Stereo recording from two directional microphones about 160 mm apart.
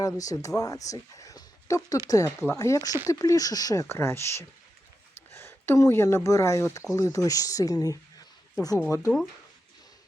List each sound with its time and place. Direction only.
0.0 s speech: 20° left (ahead or behind)